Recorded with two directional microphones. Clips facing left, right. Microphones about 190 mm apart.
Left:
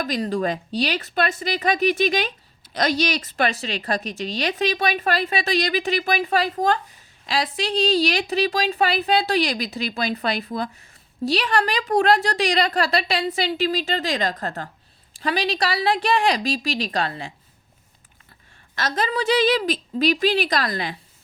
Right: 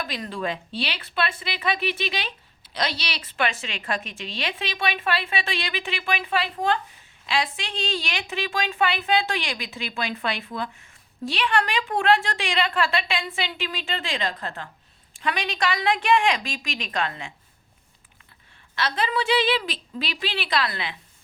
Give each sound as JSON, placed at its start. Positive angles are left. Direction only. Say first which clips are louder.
{"t": 0.0, "sound": "a woman's voice", "louder": "left 6 dB", "side_deg": 40}
{"t": 18.7, "sound": "speech", "louder": "left 2 dB", "side_deg": 45}